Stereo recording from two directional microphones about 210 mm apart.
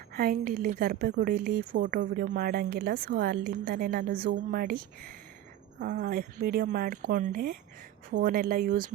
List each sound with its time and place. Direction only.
0.1 s a woman's voice: 45° right (ahead or behind)